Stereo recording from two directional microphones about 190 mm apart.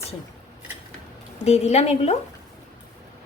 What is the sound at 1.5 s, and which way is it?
Speech, 35° left (ahead or behind).